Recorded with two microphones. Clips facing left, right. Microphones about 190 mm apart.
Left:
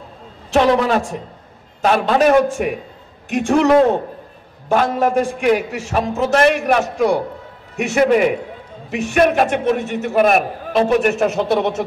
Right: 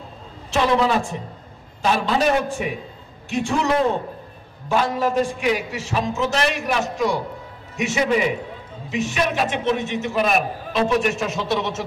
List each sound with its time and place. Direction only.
0.5 s a man's voice: 55° left (ahead or behind)